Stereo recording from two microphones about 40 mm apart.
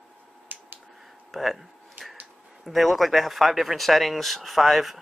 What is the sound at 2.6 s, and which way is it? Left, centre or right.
Speech, centre.